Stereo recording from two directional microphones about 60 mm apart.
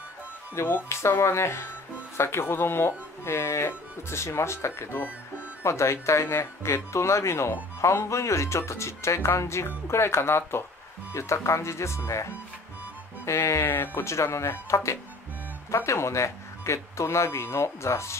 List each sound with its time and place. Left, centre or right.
0.6 s speech: left
5.6 s speech: left
13.2 s speech: left